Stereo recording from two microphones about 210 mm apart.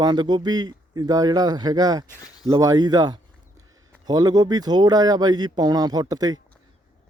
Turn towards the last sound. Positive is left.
turn(degrees=-20)  # may be behind; listen again after turning